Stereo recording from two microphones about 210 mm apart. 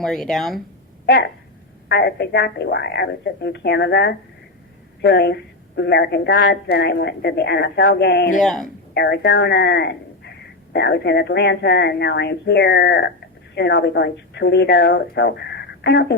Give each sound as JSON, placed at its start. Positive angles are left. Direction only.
{"t": 0.0, "sound": "speech", "side_deg": 0}
{"t": 1.0, "sound": "speech", "side_deg": 50}
{"t": 8.4, "sound": "speech", "side_deg": 0}
{"t": 9.0, "sound": "speech", "side_deg": 50}